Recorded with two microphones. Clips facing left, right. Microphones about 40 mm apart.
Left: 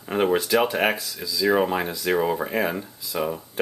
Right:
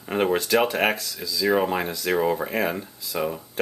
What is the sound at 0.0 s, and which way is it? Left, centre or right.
Speech, centre.